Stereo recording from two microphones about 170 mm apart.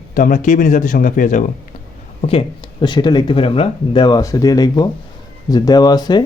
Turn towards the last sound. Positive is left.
turn(degrees=25)  # may be behind; listen again after turning